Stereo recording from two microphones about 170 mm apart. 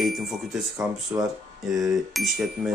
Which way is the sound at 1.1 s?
20° right (ahead or behind).